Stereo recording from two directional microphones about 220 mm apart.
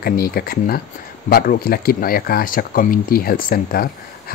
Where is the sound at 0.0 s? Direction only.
45° left (ahead or behind).